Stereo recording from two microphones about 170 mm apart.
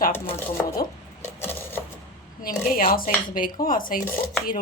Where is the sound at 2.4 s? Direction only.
55° left (ahead or behind).